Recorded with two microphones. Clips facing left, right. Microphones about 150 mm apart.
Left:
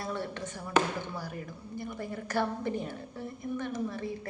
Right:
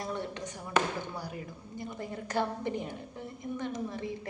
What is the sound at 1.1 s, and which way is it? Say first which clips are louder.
A woman's voice: left 1 dB; 15° right (ahead or behind).